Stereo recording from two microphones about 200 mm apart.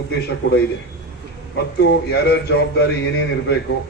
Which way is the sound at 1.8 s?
55° left (ahead or behind).